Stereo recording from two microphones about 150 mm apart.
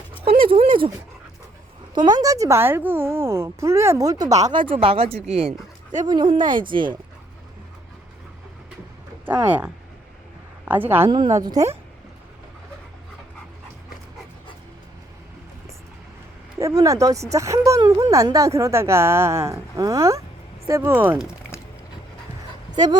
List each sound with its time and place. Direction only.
0.4 s a sound: 40° right (ahead or behind)
2.0 s speech: 30° right (ahead or behind)
4.3 s speech: 50° right (ahead or behind)
4.5 s speech: 35° right (ahead or behind)
6.1 s speech: 30° right (ahead or behind)
9.2 s speech: 10° right (ahead or behind)
11.1 s speech: 25° right (ahead or behind)
16.6 s speech: 20° right (ahead or behind)
22.7 s speech: 30° right (ahead or behind)